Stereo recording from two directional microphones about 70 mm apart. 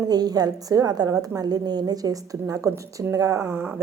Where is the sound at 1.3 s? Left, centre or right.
Right.